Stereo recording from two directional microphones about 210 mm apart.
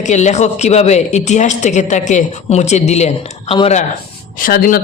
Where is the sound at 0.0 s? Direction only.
35° left (ahead or behind).